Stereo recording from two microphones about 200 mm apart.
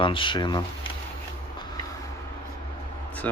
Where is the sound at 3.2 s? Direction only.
10° left (ahead or behind).